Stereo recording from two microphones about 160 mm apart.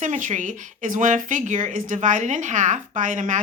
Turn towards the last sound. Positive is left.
turn(degrees=-50)  # may be behind; listen again after turning